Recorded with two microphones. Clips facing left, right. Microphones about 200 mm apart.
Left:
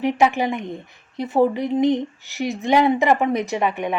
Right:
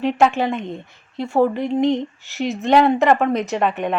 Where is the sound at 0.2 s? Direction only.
15° left (ahead or behind).